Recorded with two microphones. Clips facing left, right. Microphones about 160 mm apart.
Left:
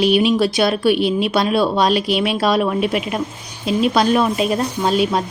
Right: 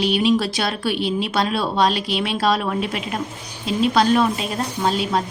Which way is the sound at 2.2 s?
35° right (ahead or behind).